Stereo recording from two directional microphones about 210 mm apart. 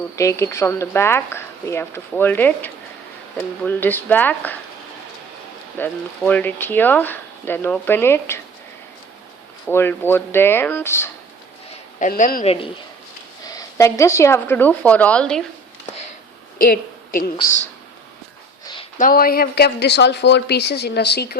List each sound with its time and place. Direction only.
0.2 s speech: 15° left (ahead or behind)
5.7 s speech: 10° left (ahead or behind)
9.6 s speech: 10° left (ahead or behind)
11.9 s a man's voice: 40° left (ahead or behind)
13.4 s speech: 15° left (ahead or behind)
16.6 s a woman's voice: 45° left (ahead or behind)
18.6 s a sound: 20° left (ahead or behind)
18.9 s a woman's voice: 40° left (ahead or behind)